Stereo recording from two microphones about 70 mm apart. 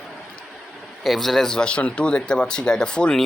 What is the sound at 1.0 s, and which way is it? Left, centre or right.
Speech, centre.